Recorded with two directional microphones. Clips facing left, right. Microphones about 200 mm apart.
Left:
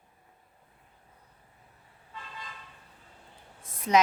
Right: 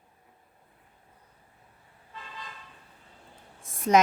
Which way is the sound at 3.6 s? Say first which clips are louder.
Right 4 dB; 50° right (ahead or behind).